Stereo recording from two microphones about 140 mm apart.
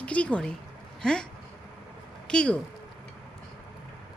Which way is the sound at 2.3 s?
5° left (ahead or behind).